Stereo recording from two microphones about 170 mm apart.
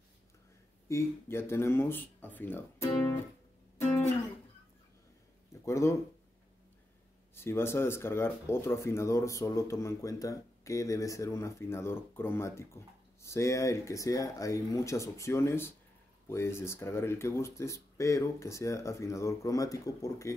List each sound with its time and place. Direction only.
0.8 s speech: 15° left (ahead or behind)
5.7 s speech: 15° left (ahead or behind)
7.3 s speech: 15° left (ahead or behind)